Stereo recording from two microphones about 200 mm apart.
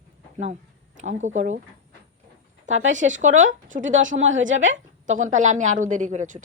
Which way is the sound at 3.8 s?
70° right (ahead or behind).